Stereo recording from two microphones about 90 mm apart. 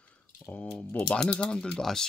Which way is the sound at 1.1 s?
10° left (ahead or behind).